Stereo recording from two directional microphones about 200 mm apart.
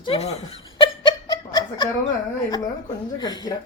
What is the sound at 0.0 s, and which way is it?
Snicker, 30° left (ahead or behind).